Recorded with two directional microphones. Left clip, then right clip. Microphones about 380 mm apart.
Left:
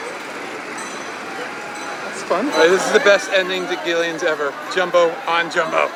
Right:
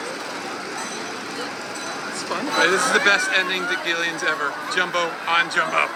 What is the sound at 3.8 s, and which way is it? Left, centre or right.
Speech, centre.